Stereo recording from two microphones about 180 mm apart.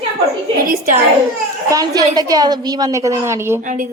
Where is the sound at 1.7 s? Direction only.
20° right (ahead or behind).